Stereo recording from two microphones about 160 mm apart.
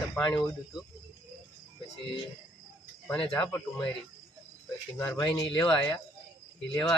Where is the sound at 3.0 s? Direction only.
5° left (ahead or behind).